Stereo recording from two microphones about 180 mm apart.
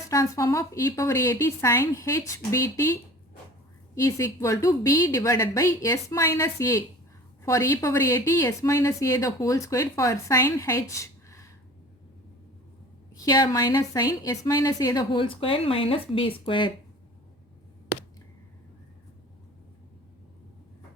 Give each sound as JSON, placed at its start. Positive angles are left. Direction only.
{"t": 0.1, "sound": "a woman's voice", "side_deg": 15}
{"t": 3.9, "sound": "a woman's voice", "side_deg": 15}
{"t": 13.1, "sound": "a woman's voice", "side_deg": 20}